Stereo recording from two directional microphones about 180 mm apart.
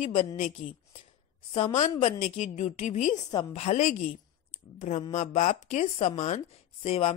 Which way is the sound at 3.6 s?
40° left (ahead or behind).